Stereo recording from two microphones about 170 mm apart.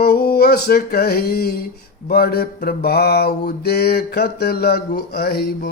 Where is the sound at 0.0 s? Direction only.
65° left (ahead or behind).